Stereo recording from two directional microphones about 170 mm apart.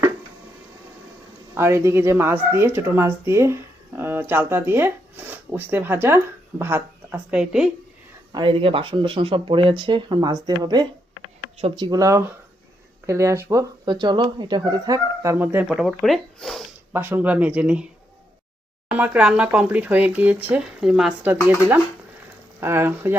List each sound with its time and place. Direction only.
1.5 s speech: 15° right (ahead or behind)
8.3 s speech: 25° right (ahead or behind); by 16.6 s centre (ahead or behind)
16.9 s speech: 10° right (ahead or behind)
18.9 s speech: 10° right (ahead or behind)